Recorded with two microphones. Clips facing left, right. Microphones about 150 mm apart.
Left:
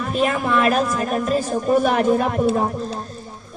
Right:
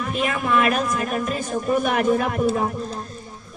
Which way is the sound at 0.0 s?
35° left (ahead or behind).